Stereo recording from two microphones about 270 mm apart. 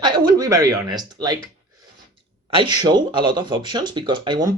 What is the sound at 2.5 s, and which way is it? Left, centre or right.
Speech, centre.